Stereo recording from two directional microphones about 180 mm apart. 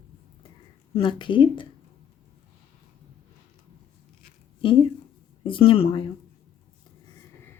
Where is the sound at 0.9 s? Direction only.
25° left (ahead or behind).